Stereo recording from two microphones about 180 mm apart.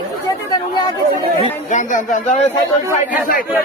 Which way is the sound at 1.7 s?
45° left (ahead or behind).